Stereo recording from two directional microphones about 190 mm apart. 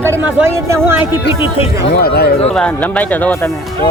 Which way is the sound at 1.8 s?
60° left (ahead or behind).